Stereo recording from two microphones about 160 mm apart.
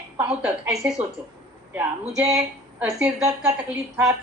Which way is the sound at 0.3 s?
5° right (ahead or behind).